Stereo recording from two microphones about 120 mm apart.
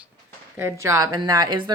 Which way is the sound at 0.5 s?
20° right (ahead or behind).